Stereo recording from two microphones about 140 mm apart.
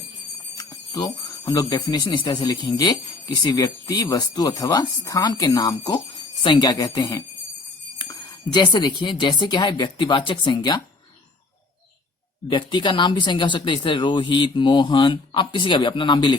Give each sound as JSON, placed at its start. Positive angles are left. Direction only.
{"t": 0.5, "sound": "speech", "side_deg": 25}
{"t": 8.5, "sound": "speech", "side_deg": 30}
{"t": 12.5, "sound": "speech", "side_deg": 35}